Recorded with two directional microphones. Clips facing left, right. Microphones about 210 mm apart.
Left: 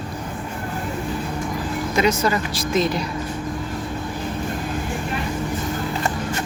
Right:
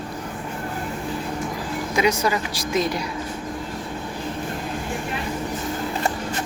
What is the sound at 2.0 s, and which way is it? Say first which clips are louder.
Speech: left 1 dB; 10° right (ahead or behind).